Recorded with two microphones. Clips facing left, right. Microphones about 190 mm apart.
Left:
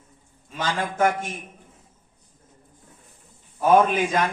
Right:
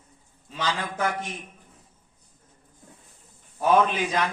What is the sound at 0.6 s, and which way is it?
Speech, 45° left (ahead or behind).